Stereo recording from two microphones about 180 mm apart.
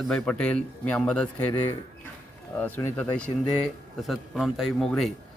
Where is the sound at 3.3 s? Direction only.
25° left (ahead or behind).